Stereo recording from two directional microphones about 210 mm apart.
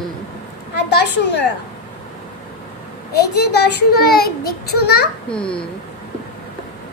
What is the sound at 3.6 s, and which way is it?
A child's voice, 50° left (ahead or behind).